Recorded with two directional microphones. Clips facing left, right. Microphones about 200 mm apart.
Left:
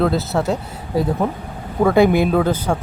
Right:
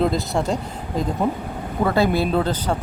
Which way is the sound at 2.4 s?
10° left (ahead or behind).